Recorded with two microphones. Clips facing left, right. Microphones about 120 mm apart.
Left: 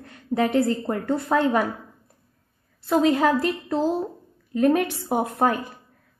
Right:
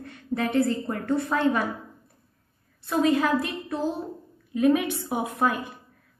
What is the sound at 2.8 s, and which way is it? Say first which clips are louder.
Speech: left 3 dB; 65° left (ahead or behind).